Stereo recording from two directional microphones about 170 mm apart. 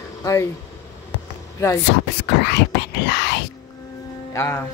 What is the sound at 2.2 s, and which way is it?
Whispering, 80° left.